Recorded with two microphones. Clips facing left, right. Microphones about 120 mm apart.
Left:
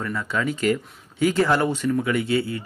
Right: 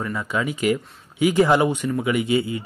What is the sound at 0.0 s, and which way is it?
Speech, 15° right (ahead or behind).